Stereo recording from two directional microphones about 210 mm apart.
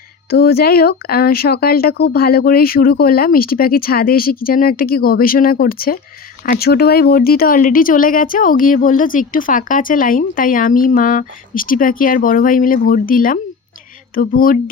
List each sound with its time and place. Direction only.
0.3 s speech: 50° left (ahead or behind)